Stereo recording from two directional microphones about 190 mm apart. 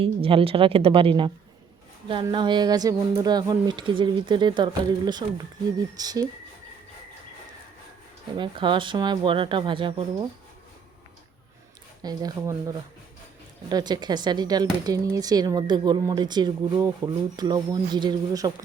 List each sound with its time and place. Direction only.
0.0 s speech: 30° right (ahead or behind)
8.4 s speech: 25° right (ahead or behind)
12.0 s speech: 20° right (ahead or behind)